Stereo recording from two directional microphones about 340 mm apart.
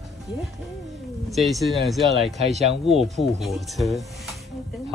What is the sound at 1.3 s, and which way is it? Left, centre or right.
Speech, centre.